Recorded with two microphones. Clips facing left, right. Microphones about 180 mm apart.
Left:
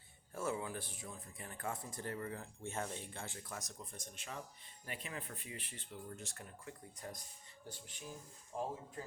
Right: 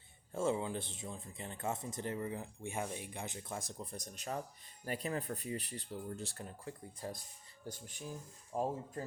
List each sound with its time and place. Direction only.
0.3 s speech: 25° right (ahead or behind)
7.7 s speech: 45° right (ahead or behind)
8.5 s speech: 55° right (ahead or behind)